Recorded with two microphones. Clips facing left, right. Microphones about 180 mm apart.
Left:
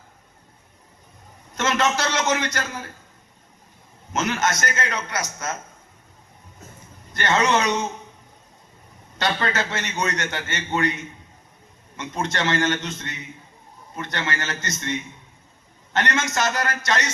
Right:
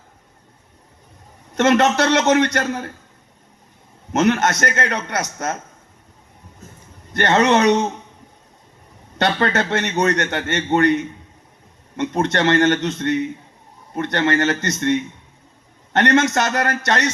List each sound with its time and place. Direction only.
1.5 s a man's voice: 60° right (ahead or behind)
4.1 s a man's voice: 65° right (ahead or behind)
7.1 s a man's voice: 60° right (ahead or behind)
9.1 s a man's voice: 60° right (ahead or behind)